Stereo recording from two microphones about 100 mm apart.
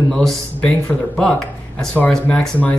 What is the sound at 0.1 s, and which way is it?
Speech, 10° left (ahead or behind).